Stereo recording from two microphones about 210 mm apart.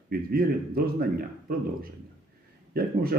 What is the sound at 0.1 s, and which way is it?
Speech, 45° right (ahead or behind).